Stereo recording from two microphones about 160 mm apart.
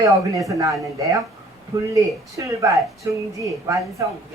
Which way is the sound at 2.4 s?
20° right (ahead or behind).